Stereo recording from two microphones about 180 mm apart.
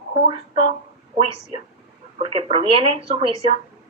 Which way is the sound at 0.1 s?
30° right (ahead or behind).